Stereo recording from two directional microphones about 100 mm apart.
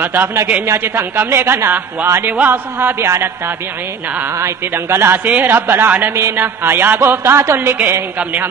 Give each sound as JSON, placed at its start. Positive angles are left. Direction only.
{"t": 0.0, "sound": "a man's voice", "side_deg": -20}
{"t": 4.4, "sound": "a man's voice", "side_deg": -25}